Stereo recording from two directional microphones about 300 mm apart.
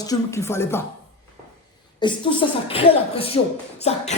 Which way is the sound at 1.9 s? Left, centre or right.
Centre.